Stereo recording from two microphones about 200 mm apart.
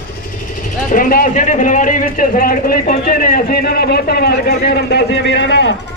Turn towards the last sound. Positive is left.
turn(degrees=60)  # may be behind; listen again after turning